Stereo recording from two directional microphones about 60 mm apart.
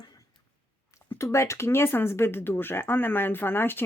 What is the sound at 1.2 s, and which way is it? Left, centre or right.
Speech, left.